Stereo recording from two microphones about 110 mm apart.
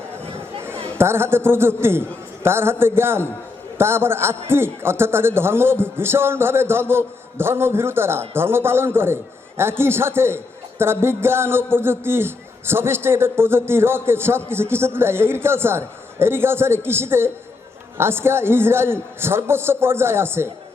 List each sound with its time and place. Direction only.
0.9 s a man's voice: 20° right (ahead or behind)